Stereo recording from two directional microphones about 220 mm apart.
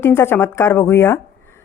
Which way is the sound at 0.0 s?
10° left (ahead or behind).